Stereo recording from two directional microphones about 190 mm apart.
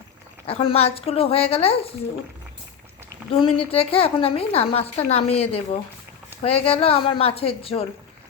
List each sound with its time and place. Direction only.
0.4 s a woman's voice: 30° left (ahead or behind)
3.3 s a woman's voice: 30° left (ahead or behind)